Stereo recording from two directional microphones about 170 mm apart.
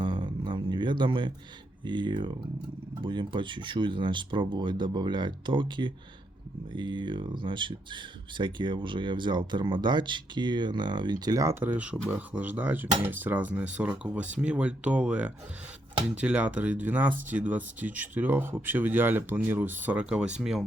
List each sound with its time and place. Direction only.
0.0 s guitar: 30° right (ahead or behind)
1.8 s speech: 25° right (ahead or behind); by 20.7 s 5° right (ahead or behind)